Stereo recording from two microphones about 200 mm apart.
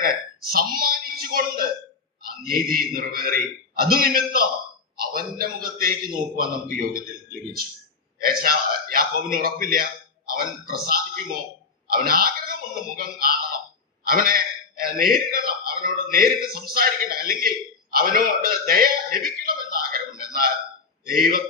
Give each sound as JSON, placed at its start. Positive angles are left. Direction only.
{"t": 0.0, "sound": "a man's voice", "side_deg": -45}
{"t": 8.2, "sound": "a man's voice", "side_deg": -45}